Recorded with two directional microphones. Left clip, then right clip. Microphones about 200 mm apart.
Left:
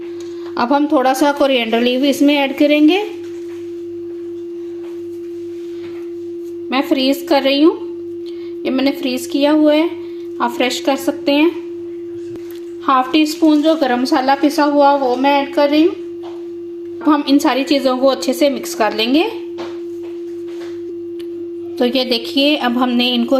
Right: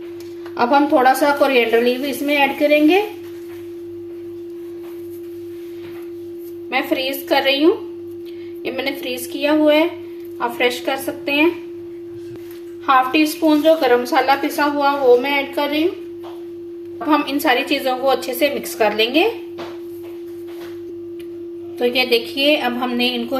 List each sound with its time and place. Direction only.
0.5 s a woman's voice: 45° left (ahead or behind)
6.7 s a woman's voice: 35° left (ahead or behind)
12.8 s a woman's voice: 45° left (ahead or behind)
17.1 s a woman's voice: 30° left (ahead or behind)
21.8 s a woman's voice: 40° left (ahead or behind)